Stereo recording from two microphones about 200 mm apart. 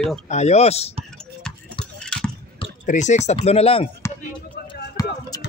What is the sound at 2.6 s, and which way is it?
Speech, 35° left (ahead or behind).